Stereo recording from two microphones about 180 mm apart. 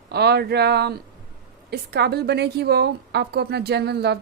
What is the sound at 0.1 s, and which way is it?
A woman's voice, 65° right (ahead or behind).